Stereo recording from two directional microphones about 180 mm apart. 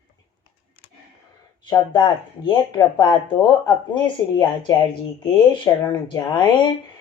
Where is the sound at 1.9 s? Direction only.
25° left (ahead or behind).